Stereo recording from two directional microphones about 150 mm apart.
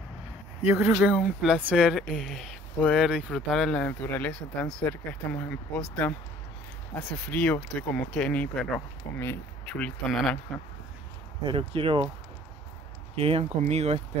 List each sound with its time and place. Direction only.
0.7 s speech: 15° right (ahead or behind); by 10.4 s 5° left (ahead or behind)
11.4 s speech: 35° right (ahead or behind)
13.1 s speech: 40° right (ahead or behind)